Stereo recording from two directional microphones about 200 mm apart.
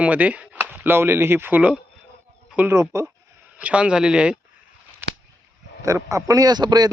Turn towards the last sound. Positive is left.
turn(degrees=-20)  # may be behind; listen again after turning